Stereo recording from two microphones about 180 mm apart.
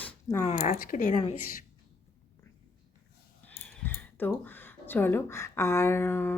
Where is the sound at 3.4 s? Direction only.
10° left (ahead or behind).